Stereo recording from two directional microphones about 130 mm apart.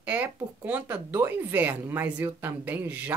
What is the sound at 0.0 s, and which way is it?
Speech, 15° right (ahead or behind).